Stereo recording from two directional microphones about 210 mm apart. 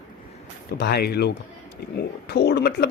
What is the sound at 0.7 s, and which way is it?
Speech, 50° left (ahead or behind).